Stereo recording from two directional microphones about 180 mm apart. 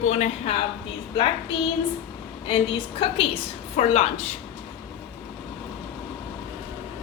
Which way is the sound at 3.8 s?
35° left (ahead or behind).